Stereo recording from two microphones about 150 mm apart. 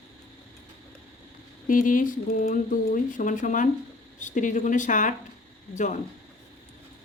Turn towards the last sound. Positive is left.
turn(degrees=55)  # may be behind; listen again after turning